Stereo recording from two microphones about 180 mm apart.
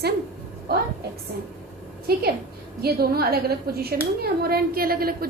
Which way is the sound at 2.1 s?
60° right (ahead or behind).